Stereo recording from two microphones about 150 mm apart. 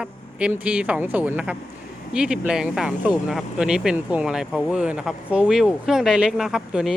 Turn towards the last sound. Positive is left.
turn(degrees=-5)  # may be behind; listen again after turning